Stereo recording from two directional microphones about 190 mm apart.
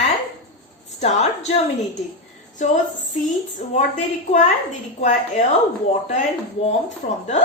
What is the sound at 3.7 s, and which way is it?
Speech, 40° left (ahead or behind).